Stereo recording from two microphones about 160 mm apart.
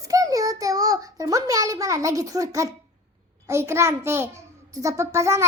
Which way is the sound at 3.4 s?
15° right (ahead or behind).